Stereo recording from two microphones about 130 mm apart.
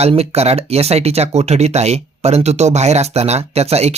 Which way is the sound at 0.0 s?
55° right (ahead or behind).